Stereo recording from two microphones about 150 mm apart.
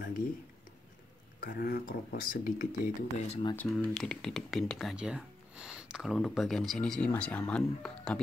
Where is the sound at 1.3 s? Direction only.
75° left (ahead or behind).